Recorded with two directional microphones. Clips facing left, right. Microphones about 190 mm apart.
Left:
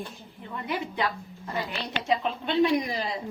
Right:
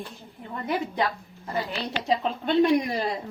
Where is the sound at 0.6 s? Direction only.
45° right (ahead or behind).